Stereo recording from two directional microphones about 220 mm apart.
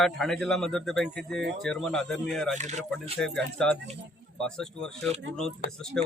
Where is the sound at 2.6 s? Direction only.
30° right (ahead or behind).